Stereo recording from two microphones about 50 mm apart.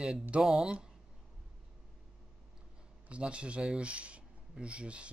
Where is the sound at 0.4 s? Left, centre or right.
Centre.